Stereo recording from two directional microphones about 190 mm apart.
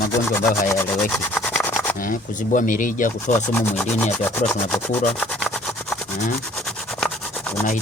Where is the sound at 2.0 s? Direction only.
45° left (ahead or behind).